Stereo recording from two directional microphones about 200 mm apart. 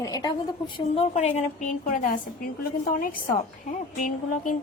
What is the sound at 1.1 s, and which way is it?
A woman's voice, 35° left (ahead or behind).